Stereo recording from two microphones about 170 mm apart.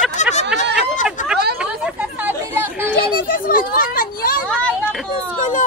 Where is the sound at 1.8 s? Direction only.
10° right (ahead or behind).